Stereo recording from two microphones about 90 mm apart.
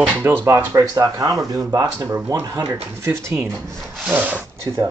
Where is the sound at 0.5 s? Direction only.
40° right (ahead or behind).